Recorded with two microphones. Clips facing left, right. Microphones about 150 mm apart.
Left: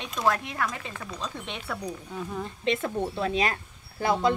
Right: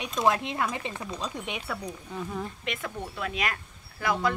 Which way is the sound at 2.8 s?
30° left (ahead or behind).